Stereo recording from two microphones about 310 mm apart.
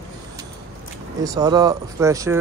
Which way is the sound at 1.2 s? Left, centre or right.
Centre.